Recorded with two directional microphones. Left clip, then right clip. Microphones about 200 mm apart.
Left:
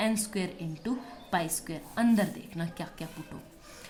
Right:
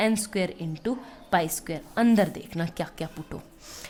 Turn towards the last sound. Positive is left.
turn(degrees=-45)  # may be behind; listen again after turning